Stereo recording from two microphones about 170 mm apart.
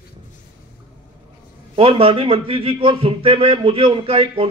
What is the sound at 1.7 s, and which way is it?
A man's voice, 35° right (ahead or behind).